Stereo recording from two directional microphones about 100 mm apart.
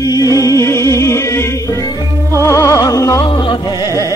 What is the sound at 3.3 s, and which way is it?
Music, 50° left (ahead or behind).